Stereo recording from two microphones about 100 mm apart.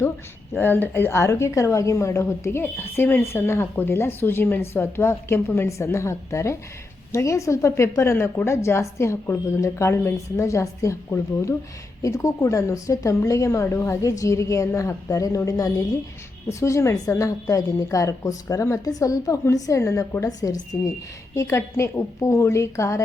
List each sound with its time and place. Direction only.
0.5 s a woman's voice: 20° left (ahead or behind)